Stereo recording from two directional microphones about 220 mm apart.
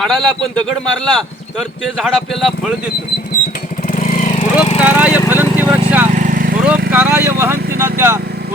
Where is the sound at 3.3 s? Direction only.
40° left (ahead or behind).